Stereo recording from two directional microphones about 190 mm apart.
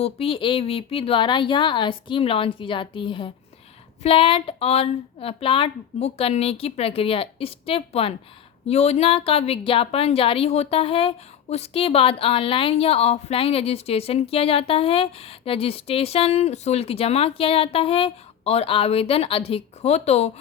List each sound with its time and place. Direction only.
0.0 s a woman's voice: 30° left (ahead or behind)